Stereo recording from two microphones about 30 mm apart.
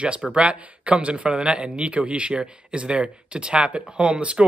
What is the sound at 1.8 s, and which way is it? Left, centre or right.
Speech, right.